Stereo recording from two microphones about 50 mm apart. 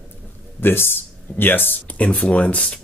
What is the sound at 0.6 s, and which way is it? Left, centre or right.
Speech, left.